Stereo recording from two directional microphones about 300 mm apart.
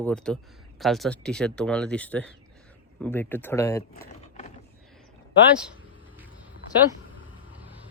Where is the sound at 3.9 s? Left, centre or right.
Left.